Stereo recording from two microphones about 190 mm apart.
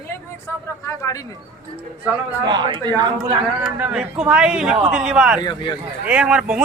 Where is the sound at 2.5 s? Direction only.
25° right (ahead or behind).